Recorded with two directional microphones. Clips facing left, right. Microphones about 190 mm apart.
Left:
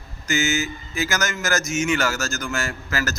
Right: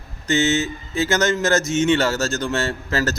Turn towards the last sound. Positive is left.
turn(degrees=-30)  # may be behind; listen again after turning